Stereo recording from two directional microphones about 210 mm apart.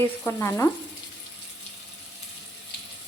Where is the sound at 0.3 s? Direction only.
10° left (ahead or behind).